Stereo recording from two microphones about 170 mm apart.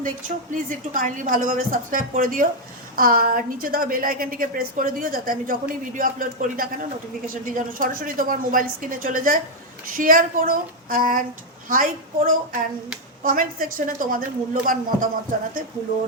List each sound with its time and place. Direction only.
0.0 s a woman's voice: 50° right (ahead or behind)